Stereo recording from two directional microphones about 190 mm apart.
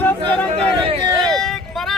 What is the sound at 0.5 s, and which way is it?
Speech, 30° right (ahead or behind).